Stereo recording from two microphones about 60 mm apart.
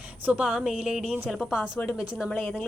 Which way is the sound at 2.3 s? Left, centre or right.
Left.